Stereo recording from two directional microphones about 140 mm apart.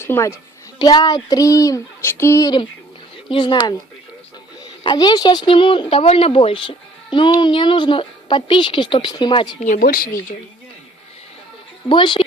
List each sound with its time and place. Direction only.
0.0 s a child's voice: 20° left (ahead or behind)
0.8 s speech: 30° left (ahead or behind)
3.2 s speech: 35° left (ahead or behind)
4.8 s speech: 30° left (ahead or behind)
9.6 s speech: 75° left (ahead or behind); by 10.3 s 90° left
11.9 s speech: 35° left (ahead or behind)